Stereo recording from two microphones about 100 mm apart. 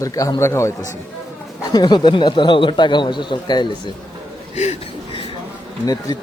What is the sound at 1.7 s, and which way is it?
A man's voice, 45° left (ahead or behind).